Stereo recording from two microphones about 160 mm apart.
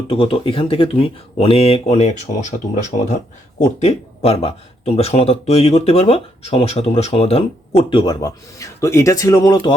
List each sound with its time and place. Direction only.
0.1 s speech: 35° left (ahead or behind)
3.8 s speech: 40° left (ahead or behind); by 9.7 s 25° left (ahead or behind)